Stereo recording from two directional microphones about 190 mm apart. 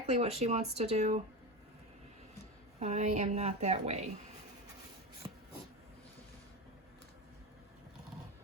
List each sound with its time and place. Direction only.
0.1 s speech: 35° right (ahead or behind)
2.8 s speech: 35° right (ahead or behind)
5.2 s a sound: 25° right (ahead or behind)